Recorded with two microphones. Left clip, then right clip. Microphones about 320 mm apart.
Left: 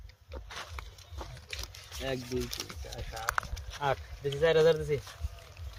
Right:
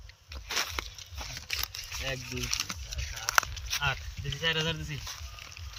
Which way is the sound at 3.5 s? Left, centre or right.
Centre.